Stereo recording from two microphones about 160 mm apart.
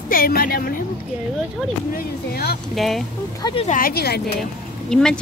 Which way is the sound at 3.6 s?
60° left (ahead or behind).